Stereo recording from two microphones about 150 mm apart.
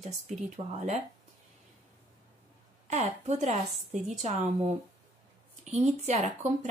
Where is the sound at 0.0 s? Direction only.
50° right (ahead or behind).